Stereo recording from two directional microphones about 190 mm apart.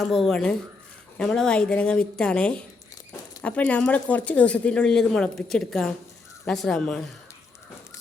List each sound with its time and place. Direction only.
0.0 s speech: centre (ahead or behind)